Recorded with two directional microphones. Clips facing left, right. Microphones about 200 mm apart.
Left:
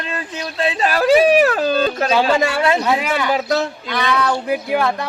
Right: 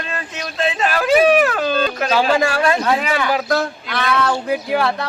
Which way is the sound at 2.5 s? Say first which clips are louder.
Even; 20° left (ahead or behind).